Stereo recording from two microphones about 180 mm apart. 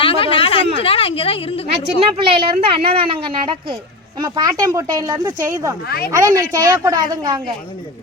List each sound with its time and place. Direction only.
0.0 s a woman's voice: 30° left (ahead or behind)
1.7 s a woman's voice: 30° right (ahead or behind)